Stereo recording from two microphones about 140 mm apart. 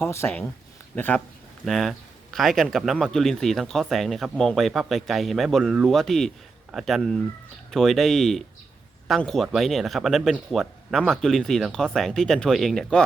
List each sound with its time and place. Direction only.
0.1 s speech: 15° left (ahead or behind)
1.6 s speech: centre (ahead or behind)